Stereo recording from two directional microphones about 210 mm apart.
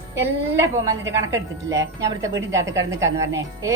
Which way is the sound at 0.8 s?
15° right (ahead or behind).